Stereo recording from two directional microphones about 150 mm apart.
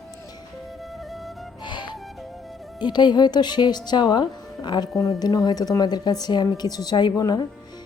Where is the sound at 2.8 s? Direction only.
30° left (ahead or behind).